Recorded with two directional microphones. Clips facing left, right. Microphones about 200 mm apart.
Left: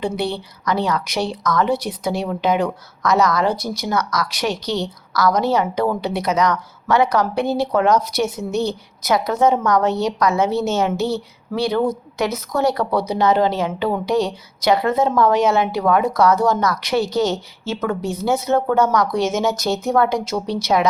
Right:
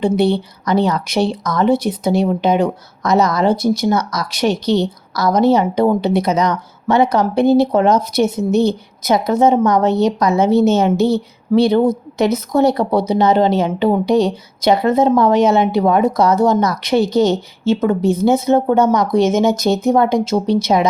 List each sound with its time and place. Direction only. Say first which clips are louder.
0.0 s speech: right 8 dB; 25° right (ahead or behind)
18.0 s speech: right 9 dB; 55° right (ahead or behind)
18.4 s speech: right 4 dB; 20° right (ahead or behind)